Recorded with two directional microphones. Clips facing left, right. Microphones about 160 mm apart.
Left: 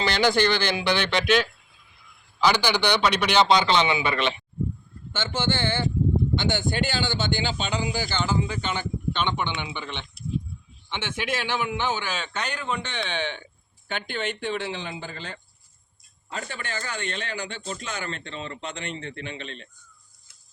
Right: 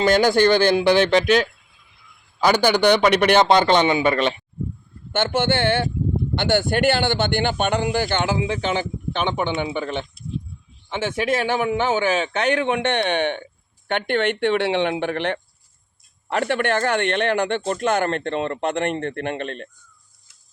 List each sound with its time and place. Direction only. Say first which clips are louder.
0.0 s a man's voice: right 6 dB; 45° right (ahead or behind)
2.4 s a man's voice: right 5 dB; 50° right (ahead or behind)
5.1 s speech: right 7 dB; 60° right (ahead or behind); by 8.6 s 85° right
9.3 s a man's voice: right 7 dB; 45° right (ahead or behind)
11.9 s speech: right 9 dB; 60° right (ahead or behind)